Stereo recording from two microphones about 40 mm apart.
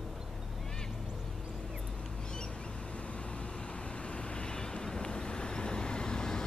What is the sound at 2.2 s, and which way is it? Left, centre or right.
Vehicle, centre.